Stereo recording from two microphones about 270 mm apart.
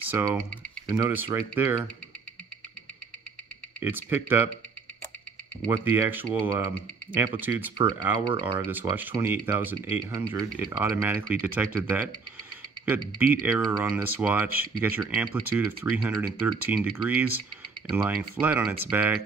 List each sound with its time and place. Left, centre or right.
0.1 s speech: centre
3.8 s speech: centre
5.7 s speech: centre
15.5 s speech: centre